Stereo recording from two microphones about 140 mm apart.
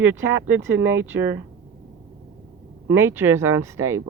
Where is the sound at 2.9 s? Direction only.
15° right (ahead or behind).